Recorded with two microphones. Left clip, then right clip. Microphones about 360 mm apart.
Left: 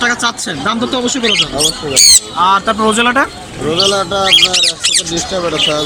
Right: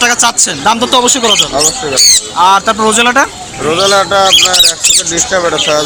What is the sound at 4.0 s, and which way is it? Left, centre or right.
Speech, right.